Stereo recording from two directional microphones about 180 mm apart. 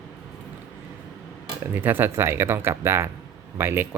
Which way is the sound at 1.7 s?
10° right (ahead or behind).